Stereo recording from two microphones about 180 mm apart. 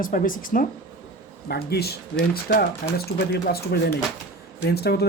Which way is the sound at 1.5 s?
60° left (ahead or behind).